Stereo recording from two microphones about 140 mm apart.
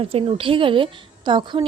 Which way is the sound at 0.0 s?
40° right (ahead or behind).